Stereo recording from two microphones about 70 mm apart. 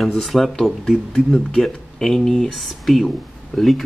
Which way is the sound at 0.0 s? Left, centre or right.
Centre.